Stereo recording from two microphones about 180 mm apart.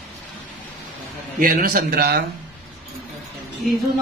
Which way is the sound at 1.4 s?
50° right (ahead or behind).